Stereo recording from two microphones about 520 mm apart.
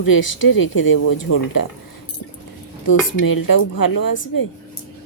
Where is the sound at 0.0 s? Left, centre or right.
Left.